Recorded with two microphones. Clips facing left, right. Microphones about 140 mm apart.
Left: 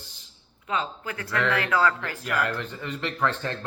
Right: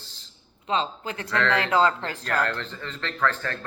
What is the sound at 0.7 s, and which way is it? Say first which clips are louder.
Speech: right 3 dB; 25° right (ahead or behind).